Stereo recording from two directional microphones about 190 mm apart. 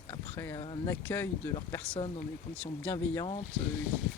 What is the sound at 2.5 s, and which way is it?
Speech, 5° left (ahead or behind).